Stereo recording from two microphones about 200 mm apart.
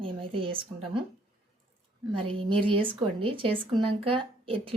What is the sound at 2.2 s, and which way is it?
Speech, 25° right (ahead or behind).